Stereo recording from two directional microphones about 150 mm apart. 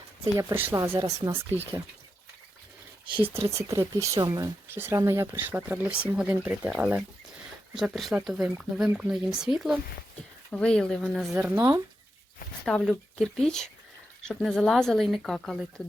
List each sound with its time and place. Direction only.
0.3 s speech: 15° right (ahead or behind)
3.2 s speech: 35° right (ahead or behind)
3.4 s speech: 20° right (ahead or behind)
10.5 s speech: 5° left (ahead or behind)
11.2 s speech: 10° right (ahead or behind)
12.6 s speech: centre (ahead or behind)